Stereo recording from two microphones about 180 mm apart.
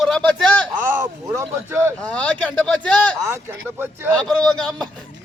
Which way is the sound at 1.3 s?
15° right (ahead or behind).